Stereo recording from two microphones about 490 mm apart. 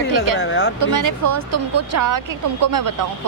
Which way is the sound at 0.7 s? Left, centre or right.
Right.